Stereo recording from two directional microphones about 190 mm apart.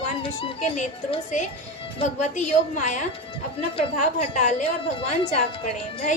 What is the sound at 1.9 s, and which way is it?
A woman's voice, 40° left (ahead or behind).